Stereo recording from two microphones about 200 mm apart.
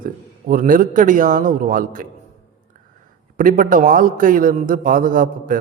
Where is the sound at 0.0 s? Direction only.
45° right (ahead or behind).